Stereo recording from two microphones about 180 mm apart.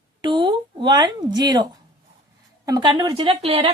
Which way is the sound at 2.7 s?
25° right (ahead or behind).